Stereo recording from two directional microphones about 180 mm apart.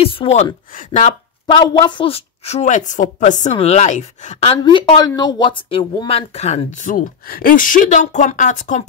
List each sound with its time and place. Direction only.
0.0 s speech: 30° left (ahead or behind)
1.5 s speech: 25° left (ahead or behind); by 8.8 s 45° left (ahead or behind)